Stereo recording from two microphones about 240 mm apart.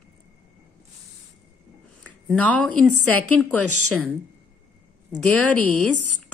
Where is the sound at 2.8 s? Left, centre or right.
Right.